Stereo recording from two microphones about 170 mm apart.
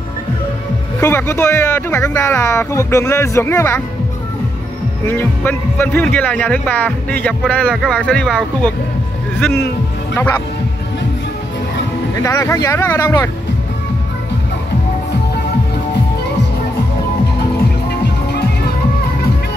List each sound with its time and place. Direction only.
1.0 s speech: 15° left (ahead or behind)
5.0 s speech: 10° left (ahead or behind)
12.2 s speech: 15° left (ahead or behind)